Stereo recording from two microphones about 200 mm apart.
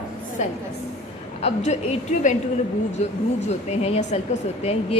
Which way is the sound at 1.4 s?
35° left (ahead or behind).